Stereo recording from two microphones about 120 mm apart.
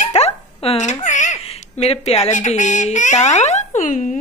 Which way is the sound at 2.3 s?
90° left.